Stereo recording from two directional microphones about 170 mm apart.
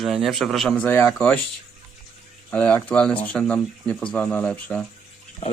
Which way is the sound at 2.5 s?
10° left (ahead or behind).